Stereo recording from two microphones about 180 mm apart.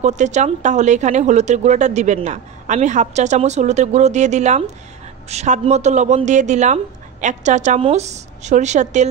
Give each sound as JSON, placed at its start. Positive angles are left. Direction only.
{"t": 0.0, "sound": "a woman's voice", "side_deg": -40}